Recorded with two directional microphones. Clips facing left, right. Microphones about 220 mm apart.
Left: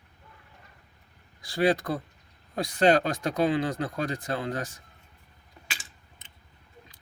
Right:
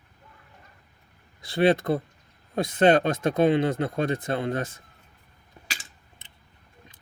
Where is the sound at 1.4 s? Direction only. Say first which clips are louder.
Right 3 dB; 25° right (ahead or behind).